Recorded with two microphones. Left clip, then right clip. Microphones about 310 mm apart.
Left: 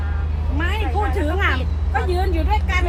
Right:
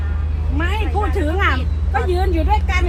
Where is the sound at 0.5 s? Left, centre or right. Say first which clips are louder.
Right 1 dB; centre.